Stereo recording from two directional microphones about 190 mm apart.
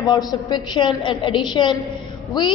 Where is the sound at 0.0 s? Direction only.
20° left (ahead or behind).